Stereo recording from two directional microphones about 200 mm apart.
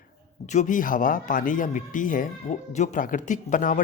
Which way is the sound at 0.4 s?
40° left (ahead or behind).